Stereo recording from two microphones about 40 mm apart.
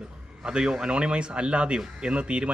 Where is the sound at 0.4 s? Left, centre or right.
Right.